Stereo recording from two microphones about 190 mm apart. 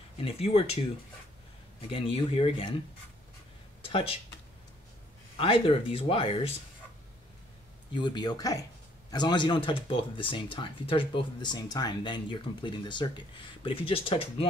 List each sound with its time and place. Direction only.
0.2 s speech: 30° left (ahead or behind)
1.8 s speech: 30° left (ahead or behind)
3.8 s speech: 30° left (ahead or behind)
5.4 s speech: 30° left (ahead or behind)
7.9 s speech: 25° left (ahead or behind)